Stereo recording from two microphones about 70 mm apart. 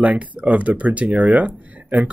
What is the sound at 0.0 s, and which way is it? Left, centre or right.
Speech, centre.